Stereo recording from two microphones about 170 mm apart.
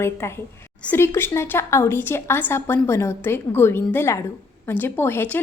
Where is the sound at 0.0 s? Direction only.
15° left (ahead or behind).